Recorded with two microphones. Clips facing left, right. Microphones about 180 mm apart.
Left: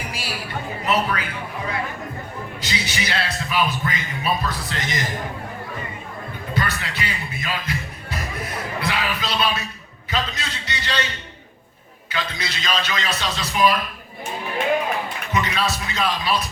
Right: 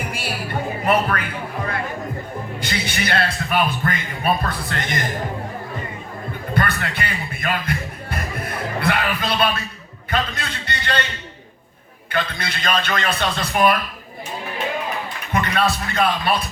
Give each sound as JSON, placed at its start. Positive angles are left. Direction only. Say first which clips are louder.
{"t": 0.1, "sound": "music", "louder": "right 3 dB", "side_deg": -55}
{"t": 0.9, "sound": "speech", "louder": "right 3 dB", "side_deg": -55}
{"t": 2.6, "sound": "a man's voice", "louder": "right 2 dB", "side_deg": -55}
{"t": 6.5, "sound": "a man's voice", "louder": "right 3 dB", "side_deg": -55}
{"t": 12.0, "sound": "a man's voice", "louder": "right 4 dB", "side_deg": -55}
{"t": 15.3, "sound": "a man's voice", "louder": "right 4 dB", "side_deg": -55}